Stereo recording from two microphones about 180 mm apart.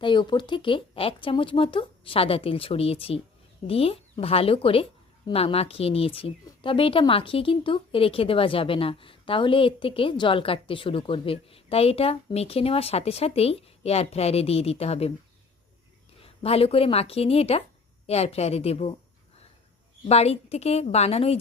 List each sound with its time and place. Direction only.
0.0 s speech: 25° left (ahead or behind)
16.2 s speech: 35° left (ahead or behind)
20.1 s speech: 35° left (ahead or behind)